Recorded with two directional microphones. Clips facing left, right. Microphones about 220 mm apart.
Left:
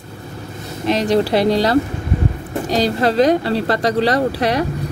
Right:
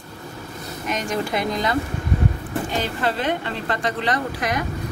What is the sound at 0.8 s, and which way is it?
Speech, 35° left (ahead or behind).